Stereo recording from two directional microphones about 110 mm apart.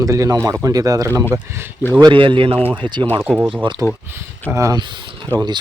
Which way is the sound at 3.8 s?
30° right (ahead or behind).